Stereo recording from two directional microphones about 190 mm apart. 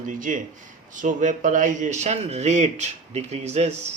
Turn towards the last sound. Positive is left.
turn(degrees=-35)  # may be behind; listen again after turning